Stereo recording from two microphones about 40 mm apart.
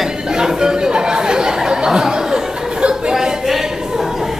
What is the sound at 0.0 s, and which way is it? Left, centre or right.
Chatter, centre.